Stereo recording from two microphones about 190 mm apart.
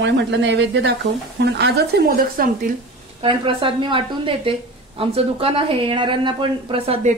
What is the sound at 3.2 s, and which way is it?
A woman's voice, 25° right (ahead or behind).